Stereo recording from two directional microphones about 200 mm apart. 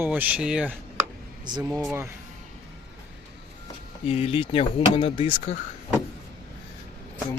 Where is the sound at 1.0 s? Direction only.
20° right (ahead or behind).